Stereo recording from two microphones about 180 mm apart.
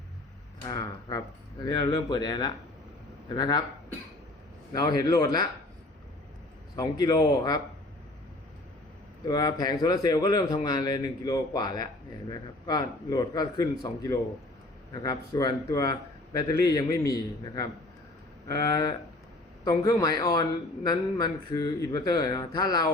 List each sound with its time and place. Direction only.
0.7 s speech: 20° left (ahead or behind)
4.7 s speech: 20° left (ahead or behind)
6.7 s speech: 20° left (ahead or behind)
9.2 s speech: 20° left (ahead or behind)